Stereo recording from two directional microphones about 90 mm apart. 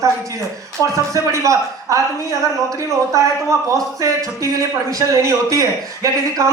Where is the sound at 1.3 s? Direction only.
35° right (ahead or behind).